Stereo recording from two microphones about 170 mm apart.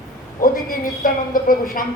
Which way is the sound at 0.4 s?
55° left (ahead or behind).